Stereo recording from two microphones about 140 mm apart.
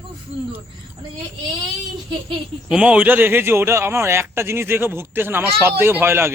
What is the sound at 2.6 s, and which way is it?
Speech, 10° right (ahead or behind).